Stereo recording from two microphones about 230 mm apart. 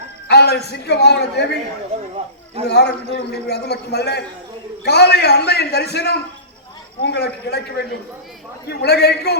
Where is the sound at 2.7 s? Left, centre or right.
Left.